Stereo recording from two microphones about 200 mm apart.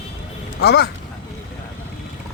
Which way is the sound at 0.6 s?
55° left (ahead or behind).